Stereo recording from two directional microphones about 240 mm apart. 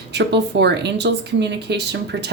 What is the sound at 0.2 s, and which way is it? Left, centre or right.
Speech, right.